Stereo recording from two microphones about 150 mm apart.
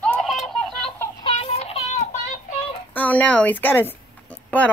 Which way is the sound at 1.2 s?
40° left (ahead or behind).